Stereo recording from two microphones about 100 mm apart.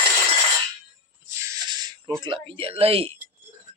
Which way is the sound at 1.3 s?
30° right (ahead or behind).